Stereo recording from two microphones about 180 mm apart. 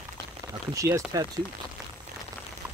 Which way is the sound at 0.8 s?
20° right (ahead or behind).